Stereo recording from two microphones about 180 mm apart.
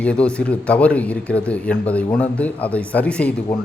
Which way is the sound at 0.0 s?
5° left (ahead or behind).